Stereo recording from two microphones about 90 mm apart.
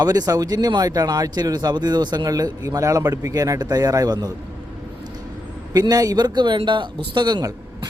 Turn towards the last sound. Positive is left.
turn(degrees=-55)  # may be behind; listen again after turning